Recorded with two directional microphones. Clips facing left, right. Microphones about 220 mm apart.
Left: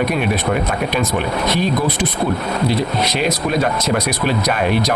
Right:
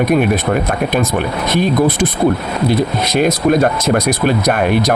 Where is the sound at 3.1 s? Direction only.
50° right (ahead or behind).